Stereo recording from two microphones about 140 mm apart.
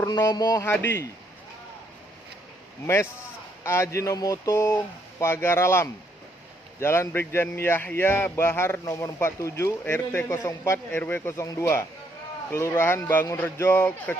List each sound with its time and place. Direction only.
0.0 s speech: 25° left (ahead or behind)
0.7 s a man's voice: 15° left (ahead or behind)
3.6 s a man's voice: 20° left (ahead or behind)